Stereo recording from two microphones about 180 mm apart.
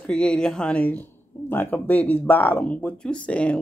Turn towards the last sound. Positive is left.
turn(degrees=5)  # may be behind; listen again after turning